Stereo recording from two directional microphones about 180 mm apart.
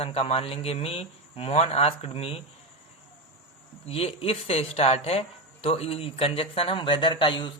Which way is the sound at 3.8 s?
35° left (ahead or behind).